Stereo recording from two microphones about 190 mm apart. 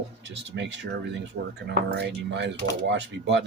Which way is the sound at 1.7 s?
65° right (ahead or behind).